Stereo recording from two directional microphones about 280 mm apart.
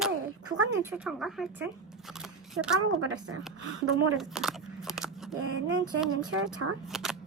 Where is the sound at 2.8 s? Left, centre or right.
Right.